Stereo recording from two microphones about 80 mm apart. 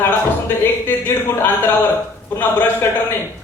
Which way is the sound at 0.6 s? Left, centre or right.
Left.